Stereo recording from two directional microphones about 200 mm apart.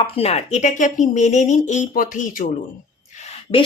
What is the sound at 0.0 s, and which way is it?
Speech, 30° left (ahead or behind).